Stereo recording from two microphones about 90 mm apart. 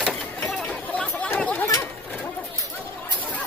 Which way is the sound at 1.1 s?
25° left (ahead or behind).